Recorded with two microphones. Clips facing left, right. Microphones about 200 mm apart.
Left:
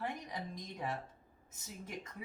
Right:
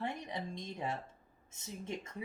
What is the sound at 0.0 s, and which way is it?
Music, 25° right (ahead or behind).